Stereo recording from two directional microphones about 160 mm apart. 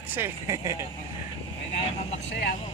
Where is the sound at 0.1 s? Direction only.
15° right (ahead or behind).